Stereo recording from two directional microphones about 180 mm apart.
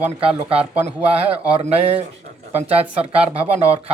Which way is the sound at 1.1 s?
35° right (ahead or behind).